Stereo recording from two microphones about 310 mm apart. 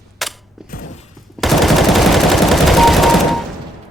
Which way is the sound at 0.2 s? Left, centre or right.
Centre.